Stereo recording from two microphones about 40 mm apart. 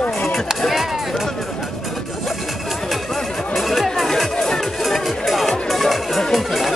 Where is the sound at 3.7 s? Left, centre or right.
Centre.